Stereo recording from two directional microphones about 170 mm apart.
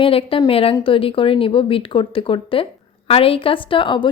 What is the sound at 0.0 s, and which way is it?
A woman's voice, 35° left (ahead or behind).